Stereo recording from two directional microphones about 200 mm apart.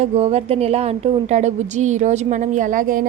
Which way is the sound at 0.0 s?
30° right (ahead or behind).